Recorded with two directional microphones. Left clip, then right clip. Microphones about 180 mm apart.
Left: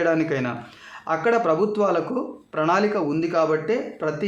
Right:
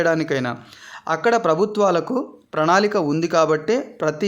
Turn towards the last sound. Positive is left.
turn(degrees=-45)  # may be behind; listen again after turning